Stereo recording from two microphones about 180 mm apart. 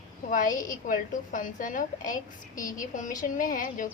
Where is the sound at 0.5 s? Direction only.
20° left (ahead or behind).